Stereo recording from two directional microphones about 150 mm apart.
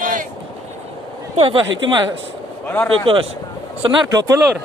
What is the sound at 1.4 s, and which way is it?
Speech, 35° right (ahead or behind).